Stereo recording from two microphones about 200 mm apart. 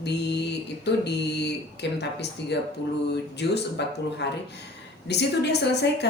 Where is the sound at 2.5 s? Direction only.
55° left (ahead or behind).